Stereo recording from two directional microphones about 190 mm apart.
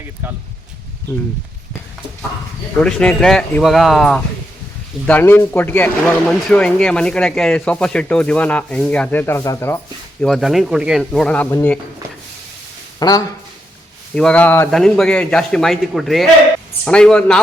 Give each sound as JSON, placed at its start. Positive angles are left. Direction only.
{"t": 2.7, "sound": "speech", "side_deg": 5}
{"t": 10.2, "sound": "speech", "side_deg": 0}
{"t": 13.0, "sound": "speech", "side_deg": 20}
{"t": 14.2, "sound": "speech", "side_deg": 5}